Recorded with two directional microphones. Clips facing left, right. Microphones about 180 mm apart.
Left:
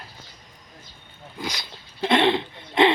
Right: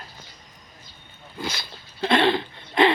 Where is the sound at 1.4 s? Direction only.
15° left (ahead or behind).